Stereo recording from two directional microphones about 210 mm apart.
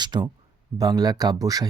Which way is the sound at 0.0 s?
20° right (ahead or behind).